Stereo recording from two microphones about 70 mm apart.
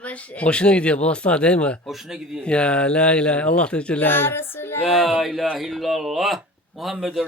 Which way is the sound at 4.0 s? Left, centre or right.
Left.